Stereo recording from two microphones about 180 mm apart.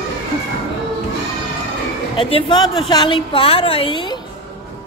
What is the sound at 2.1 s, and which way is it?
A woman's voice, 25° left (ahead or behind).